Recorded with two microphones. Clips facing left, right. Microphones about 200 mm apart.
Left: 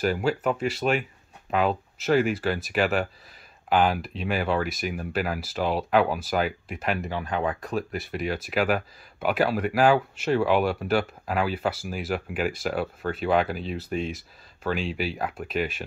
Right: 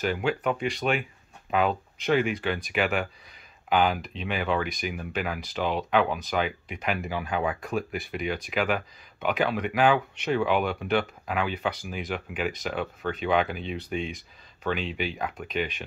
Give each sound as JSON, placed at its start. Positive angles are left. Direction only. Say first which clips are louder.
{"t": 0.3, "sound": "speech", "louder": "left 2 dB", "side_deg": 5}